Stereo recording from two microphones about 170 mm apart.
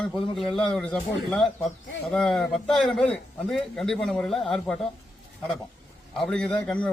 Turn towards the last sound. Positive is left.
turn(degrees=5)  # may be behind; listen again after turning